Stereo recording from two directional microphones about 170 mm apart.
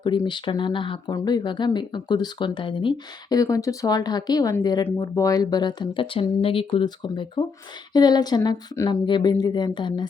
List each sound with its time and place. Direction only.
0.0 s speech: 25° left (ahead or behind)